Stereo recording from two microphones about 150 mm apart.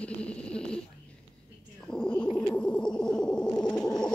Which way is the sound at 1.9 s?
5° left (ahead or behind).